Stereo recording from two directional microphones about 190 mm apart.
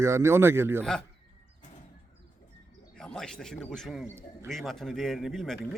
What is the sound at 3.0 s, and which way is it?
A man's voice, 5° left (ahead or behind).